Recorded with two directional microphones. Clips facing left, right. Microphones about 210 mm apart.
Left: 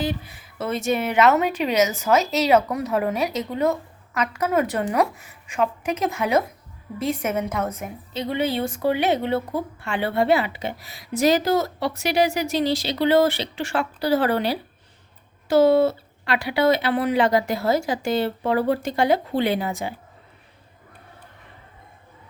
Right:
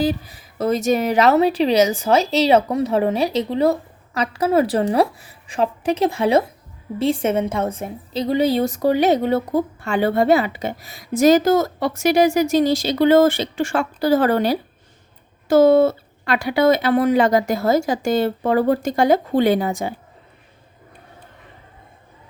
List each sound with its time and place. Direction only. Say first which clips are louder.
0.0 s a woman's voice: right 6 dB; 35° right (ahead or behind)